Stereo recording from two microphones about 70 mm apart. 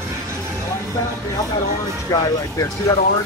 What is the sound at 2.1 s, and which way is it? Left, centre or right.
Speech, left.